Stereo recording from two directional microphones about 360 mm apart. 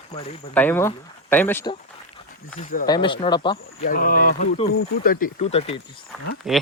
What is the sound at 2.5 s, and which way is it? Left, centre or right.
Speech, left.